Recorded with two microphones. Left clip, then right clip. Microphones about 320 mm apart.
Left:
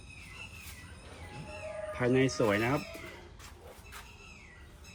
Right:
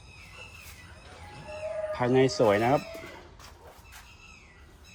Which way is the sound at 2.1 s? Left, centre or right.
Centre.